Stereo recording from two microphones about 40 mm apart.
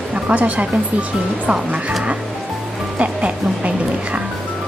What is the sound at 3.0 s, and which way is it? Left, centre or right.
Speech, right.